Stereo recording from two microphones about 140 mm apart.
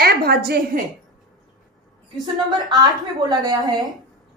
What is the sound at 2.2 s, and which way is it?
A woman's voice, 30° right (ahead or behind).